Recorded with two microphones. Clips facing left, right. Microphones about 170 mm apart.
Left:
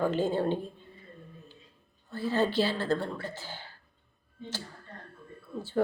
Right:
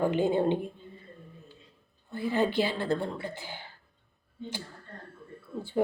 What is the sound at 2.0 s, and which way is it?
Speech, 15° right (ahead or behind).